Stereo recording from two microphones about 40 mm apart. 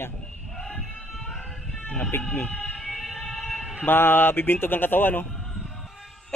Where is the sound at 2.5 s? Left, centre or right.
Centre.